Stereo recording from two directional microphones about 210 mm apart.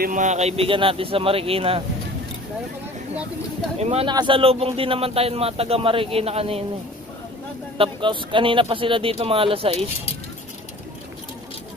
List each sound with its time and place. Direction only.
0.0 s a man's voice: 35° right (ahead or behind)
3.8 s a man's voice: 30° right (ahead or behind)
7.7 s a man's voice: 25° right (ahead or behind)